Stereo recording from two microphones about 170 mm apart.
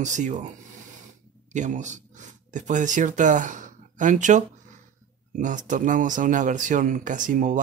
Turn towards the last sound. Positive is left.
turn(degrees=-50)  # may be behind; listen again after turning